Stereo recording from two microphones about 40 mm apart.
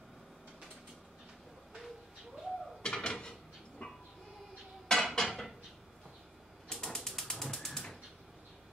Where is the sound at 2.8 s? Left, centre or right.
Centre.